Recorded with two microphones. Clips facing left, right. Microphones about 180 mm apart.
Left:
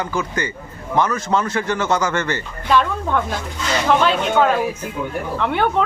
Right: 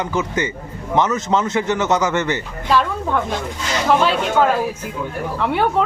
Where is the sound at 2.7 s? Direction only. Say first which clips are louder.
Even; centre (ahead or behind).